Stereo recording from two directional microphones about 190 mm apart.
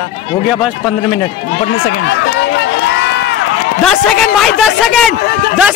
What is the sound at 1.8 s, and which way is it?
Run, 60° left (ahead or behind).